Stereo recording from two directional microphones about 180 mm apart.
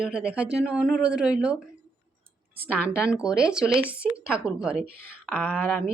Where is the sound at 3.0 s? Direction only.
5° right (ahead or behind).